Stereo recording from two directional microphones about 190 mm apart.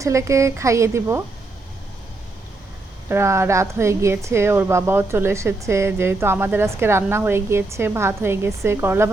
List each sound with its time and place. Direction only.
0.0 s a woman's voice: 15° right (ahead or behind)
3.1 s a woman's voice: 15° right (ahead or behind)